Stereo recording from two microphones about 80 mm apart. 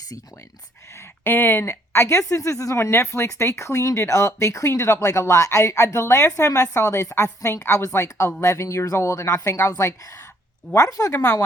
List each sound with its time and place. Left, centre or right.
0.9 s a woman's voice: left